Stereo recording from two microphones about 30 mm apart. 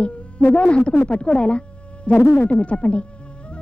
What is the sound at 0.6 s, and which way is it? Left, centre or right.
Speech, left.